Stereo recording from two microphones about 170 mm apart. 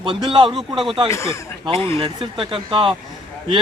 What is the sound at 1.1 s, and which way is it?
Speech, 15° left (ahead or behind).